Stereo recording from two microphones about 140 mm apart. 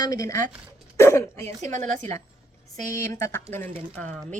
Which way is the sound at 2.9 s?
20° left (ahead or behind).